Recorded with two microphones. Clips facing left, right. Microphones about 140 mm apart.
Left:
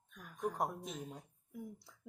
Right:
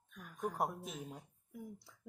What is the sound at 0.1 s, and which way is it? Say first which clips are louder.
A woman's voice: left 1 dB; centre (ahead or behind).